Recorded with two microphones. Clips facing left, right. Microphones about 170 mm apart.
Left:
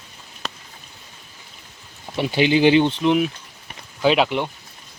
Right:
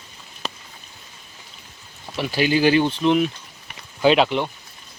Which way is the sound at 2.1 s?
25° left (ahead or behind).